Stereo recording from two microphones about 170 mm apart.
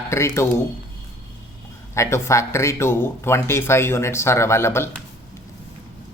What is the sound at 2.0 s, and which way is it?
Speech, 15° left (ahead or behind).